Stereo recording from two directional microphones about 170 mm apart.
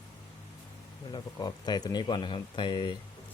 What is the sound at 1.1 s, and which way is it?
Speech, 25° left (ahead or behind).